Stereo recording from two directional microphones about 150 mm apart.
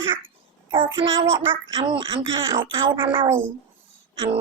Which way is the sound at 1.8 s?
35° right (ahead or behind).